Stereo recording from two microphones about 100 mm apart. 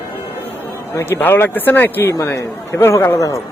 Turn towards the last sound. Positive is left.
turn(degrees=30)  # may be behind; listen again after turning